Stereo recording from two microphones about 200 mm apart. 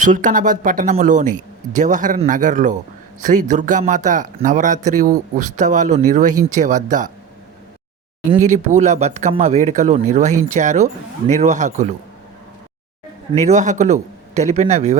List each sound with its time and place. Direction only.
0.0 s speech: 40° right (ahead or behind)
8.4 s speech: 35° right (ahead or behind)
13.3 s speech: 35° right (ahead or behind)